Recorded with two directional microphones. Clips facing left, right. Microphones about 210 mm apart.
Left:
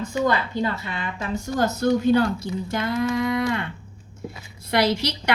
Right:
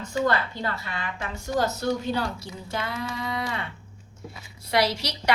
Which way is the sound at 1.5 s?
50° left (ahead or behind).